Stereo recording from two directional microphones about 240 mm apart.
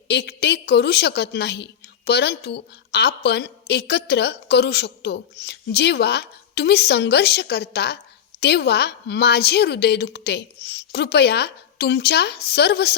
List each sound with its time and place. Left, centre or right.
0.1 s a woman's voice: left